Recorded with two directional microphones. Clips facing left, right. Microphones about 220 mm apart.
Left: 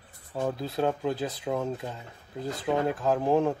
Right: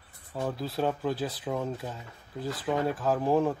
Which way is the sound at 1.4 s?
10° left (ahead or behind).